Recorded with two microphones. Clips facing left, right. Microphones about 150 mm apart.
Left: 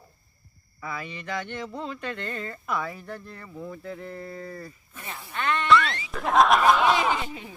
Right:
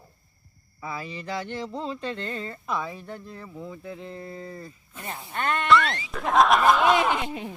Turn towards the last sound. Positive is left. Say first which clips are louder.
# right 2 dB
turn(degrees=0)  # may be behind; listen again after turning